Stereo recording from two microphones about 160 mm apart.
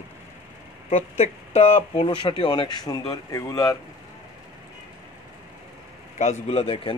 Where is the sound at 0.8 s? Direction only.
40° left (ahead or behind); by 3.7 s 20° left (ahead or behind).